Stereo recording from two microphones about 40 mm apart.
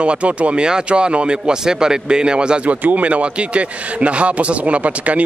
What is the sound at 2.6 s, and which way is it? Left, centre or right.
Speech, right.